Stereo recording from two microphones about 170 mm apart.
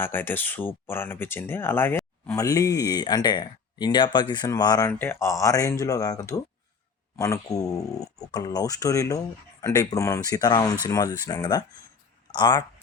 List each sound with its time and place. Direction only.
0.0 s speech: 10° left (ahead or behind)
4.9 s speech: 10° left (ahead or behind)